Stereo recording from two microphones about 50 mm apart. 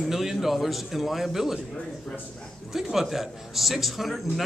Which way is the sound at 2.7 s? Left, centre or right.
Centre.